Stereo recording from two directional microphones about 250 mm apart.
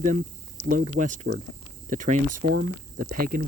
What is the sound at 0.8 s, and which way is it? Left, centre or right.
Speech, right.